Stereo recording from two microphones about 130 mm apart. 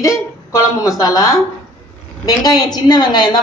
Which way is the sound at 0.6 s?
25° left (ahead or behind).